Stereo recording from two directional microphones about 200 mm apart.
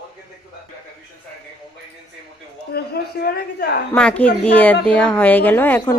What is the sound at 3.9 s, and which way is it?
Speech, 5° left (ahead or behind).